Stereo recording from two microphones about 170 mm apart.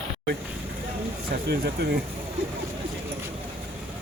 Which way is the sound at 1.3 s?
70° right (ahead or behind).